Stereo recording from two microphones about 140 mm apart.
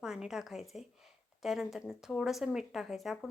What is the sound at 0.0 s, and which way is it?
Speech, 5° right (ahead or behind).